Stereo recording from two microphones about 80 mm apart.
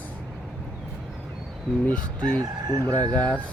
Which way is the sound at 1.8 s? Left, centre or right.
Centre.